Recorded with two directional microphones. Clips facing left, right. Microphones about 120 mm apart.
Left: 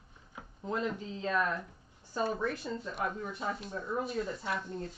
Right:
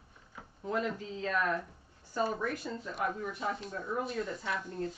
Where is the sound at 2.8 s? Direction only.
Centre (ahead or behind).